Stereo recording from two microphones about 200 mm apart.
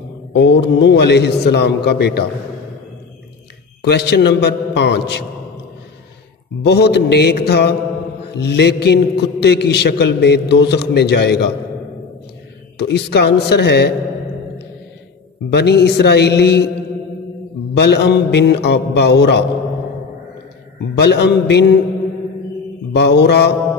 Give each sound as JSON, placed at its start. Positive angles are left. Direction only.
{"t": 0.3, "sound": "a man's voice", "side_deg": 60}
{"t": 3.8, "sound": "a man's voice", "side_deg": 55}
{"t": 6.6, "sound": "a man's voice", "side_deg": 55}
{"t": 12.7, "sound": "a man's voice", "side_deg": 55}
{"t": 15.5, "sound": "a man's voice", "side_deg": 55}
{"t": 17.7, "sound": "a man's voice", "side_deg": 55}
{"t": 21.0, "sound": "a man's voice", "side_deg": 55}
{"t": 22.9, "sound": "a man's voice", "side_deg": 55}